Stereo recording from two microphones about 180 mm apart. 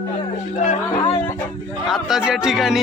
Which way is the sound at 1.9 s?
Centre (ahead or behind).